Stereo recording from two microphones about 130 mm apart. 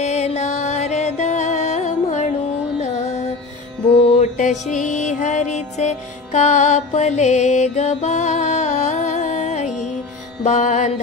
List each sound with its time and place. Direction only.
0.0 s music: 60° left (ahead or behind)
4.2 s music: 70° left (ahead or behind)